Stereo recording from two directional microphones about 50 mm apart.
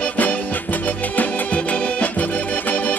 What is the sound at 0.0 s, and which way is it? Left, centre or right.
Music, left.